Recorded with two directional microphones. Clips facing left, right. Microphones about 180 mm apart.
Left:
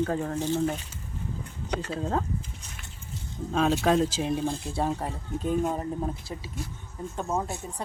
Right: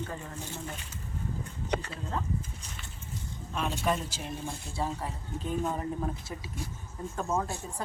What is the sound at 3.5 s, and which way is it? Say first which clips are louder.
Speech: left 8 dB; 90° left.